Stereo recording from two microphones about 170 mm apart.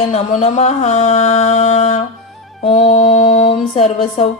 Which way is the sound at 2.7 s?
45° left (ahead or behind).